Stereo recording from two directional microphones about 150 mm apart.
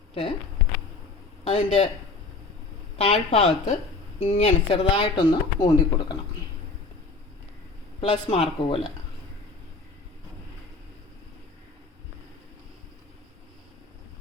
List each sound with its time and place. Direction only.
0.1 s speech: 40° left (ahead or behind)
1.5 s speech: 40° left (ahead or behind)
3.0 s speech: 40° left (ahead or behind)
8.0 s speech: 40° left (ahead or behind)